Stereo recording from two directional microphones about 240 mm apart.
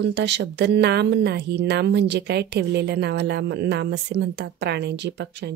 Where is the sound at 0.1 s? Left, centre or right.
Right.